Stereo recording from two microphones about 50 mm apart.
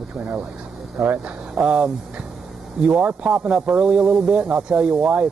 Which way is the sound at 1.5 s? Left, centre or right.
Centre.